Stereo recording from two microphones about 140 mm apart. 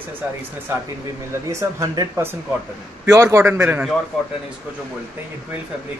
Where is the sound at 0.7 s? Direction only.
15° right (ahead or behind).